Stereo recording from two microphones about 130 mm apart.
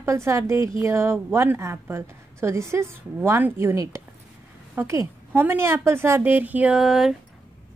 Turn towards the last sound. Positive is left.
turn(degrees=-5)  # may be behind; listen again after turning